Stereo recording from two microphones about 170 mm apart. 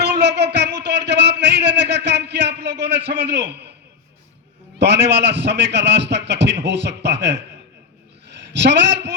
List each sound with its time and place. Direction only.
0.0 s a sound: 85° right
4.8 s a man's voice: 90° right
8.5 s a man's voice: 90° right